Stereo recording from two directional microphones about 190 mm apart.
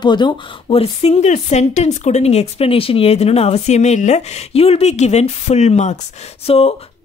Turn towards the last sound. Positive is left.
turn(degrees=30)  # may be behind; listen again after turning